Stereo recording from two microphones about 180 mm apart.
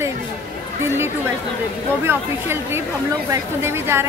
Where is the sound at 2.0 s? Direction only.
15° right (ahead or behind).